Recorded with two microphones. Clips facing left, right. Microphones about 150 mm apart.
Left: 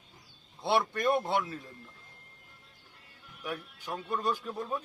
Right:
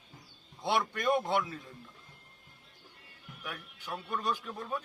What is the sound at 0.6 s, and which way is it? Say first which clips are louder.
Speech: left 3 dB; 5° left (ahead or behind).